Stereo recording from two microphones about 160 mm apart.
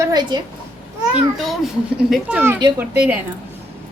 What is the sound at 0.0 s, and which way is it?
Speech, 25° right (ahead or behind).